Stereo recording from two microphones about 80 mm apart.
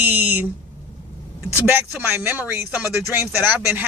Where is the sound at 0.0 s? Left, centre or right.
Right.